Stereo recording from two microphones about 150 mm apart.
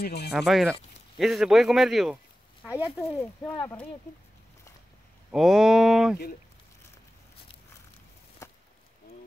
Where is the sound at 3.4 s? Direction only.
10° left (ahead or behind).